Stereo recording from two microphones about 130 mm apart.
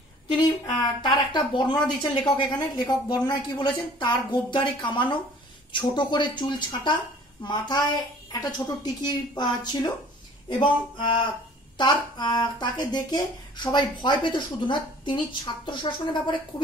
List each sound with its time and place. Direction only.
0.4 s speech: 35° left (ahead or behind)
11.7 s speech: 35° left (ahead or behind)